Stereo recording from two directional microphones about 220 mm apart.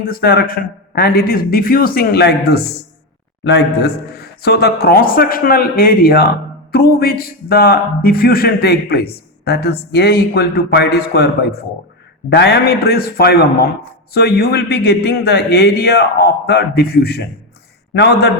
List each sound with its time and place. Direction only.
0.0 s speech: 45° left (ahead or behind)